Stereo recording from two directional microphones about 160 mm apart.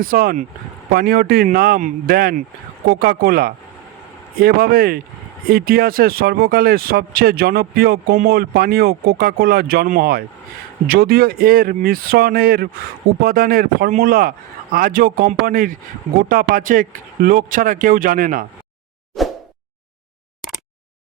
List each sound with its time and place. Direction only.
0.0 s speech: 65° right (ahead or behind)
19.2 s plop: centre (ahead or behind)